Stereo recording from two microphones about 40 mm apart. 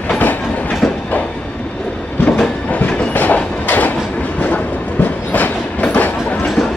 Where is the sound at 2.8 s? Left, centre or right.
Left.